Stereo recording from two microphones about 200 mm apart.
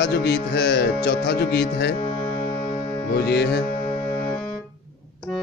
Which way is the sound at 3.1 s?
55° left (ahead or behind).